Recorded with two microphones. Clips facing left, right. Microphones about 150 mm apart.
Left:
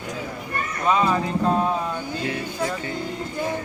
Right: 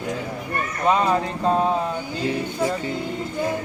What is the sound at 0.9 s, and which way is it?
Speech, 30° right (ahead or behind).